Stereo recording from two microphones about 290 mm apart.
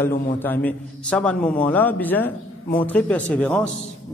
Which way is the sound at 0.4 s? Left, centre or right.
Centre.